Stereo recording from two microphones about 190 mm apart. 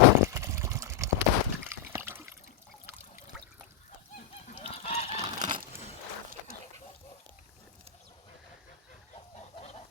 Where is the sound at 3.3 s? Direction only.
5° right (ahead or behind).